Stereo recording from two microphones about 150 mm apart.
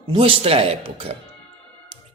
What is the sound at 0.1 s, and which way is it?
A man's voice, 35° right (ahead or behind).